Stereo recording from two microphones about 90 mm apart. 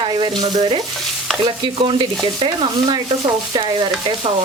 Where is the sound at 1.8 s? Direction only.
85° right; by 2.9 s 65° right (ahead or behind).